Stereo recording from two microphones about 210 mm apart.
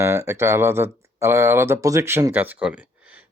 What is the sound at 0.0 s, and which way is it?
Speech, 10° right (ahead or behind).